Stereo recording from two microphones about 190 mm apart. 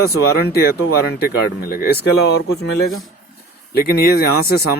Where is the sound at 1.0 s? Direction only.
55° left (ahead or behind).